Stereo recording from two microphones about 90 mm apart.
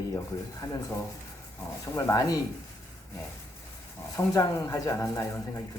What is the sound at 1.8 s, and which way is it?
Speech, 40° left (ahead or behind).